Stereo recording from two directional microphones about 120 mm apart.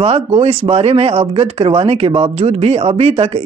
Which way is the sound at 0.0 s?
55° right (ahead or behind).